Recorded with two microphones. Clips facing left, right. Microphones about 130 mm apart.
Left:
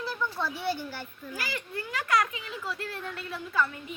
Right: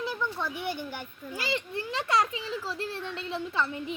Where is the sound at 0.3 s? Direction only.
15° right (ahead or behind).